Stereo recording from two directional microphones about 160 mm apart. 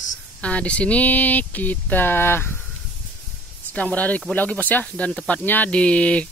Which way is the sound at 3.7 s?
10° left (ahead or behind).